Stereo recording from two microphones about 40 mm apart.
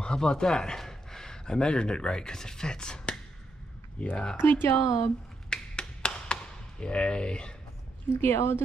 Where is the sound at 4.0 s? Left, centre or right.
Left.